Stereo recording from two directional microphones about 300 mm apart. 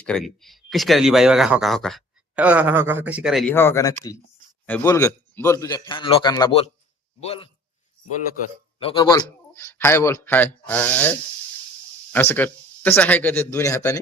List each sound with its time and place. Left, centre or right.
0.0 s speech: centre
8.8 s speech: centre
12.1 s speech: centre